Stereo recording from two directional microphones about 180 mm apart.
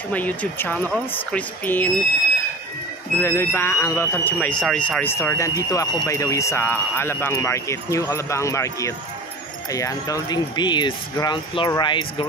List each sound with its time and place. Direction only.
0.1 s speech: 10° left (ahead or behind)
3.2 s speech: 15° left (ahead or behind)